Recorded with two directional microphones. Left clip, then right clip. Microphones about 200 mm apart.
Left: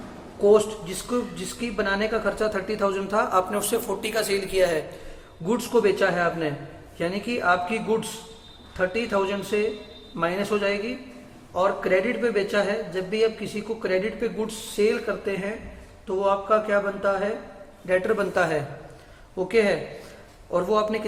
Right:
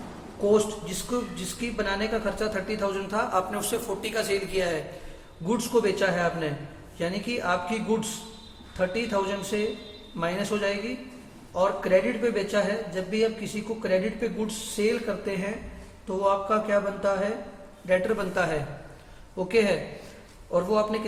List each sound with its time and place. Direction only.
0.4 s a woman's voice: 25° left (ahead or behind)
5.5 s a woman's voice: 25° left (ahead or behind)
8.8 s a woman's voice: 25° left (ahead or behind)